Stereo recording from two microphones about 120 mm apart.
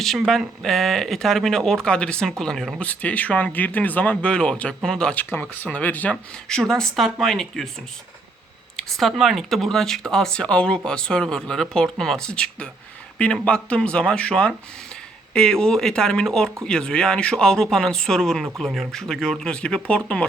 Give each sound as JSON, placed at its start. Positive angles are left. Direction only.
{"t": 0.0, "sound": "speech", "side_deg": 0}
{"t": 8.7, "sound": "speech", "side_deg": 0}